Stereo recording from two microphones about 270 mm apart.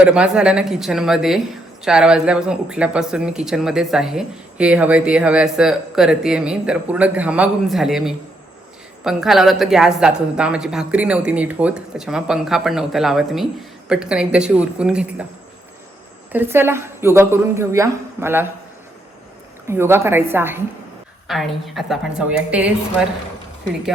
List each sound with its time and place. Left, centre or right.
0.0 s speech: centre
16.3 s a woman's voice: centre
19.6 s a woman's voice: centre